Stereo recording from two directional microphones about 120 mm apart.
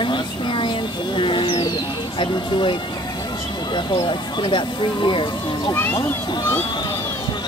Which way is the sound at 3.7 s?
40° left (ahead or behind).